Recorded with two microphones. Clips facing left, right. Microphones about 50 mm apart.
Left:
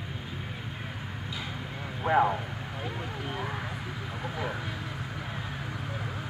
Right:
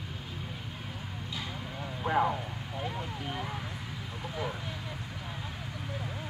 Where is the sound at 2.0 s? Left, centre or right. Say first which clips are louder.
Left 4 dB; centre.